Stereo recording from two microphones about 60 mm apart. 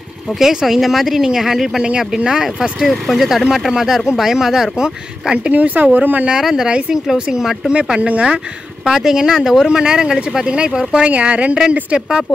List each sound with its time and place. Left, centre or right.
0.3 s speech: centre
5.5 s speech: right
6.3 s speech: centre
8.8 s speech: centre